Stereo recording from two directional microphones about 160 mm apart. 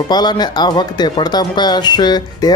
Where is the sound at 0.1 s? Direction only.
25° left (ahead or behind).